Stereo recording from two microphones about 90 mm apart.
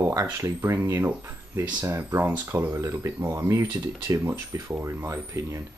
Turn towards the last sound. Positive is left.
turn(degrees=-30)  # may be behind; listen again after turning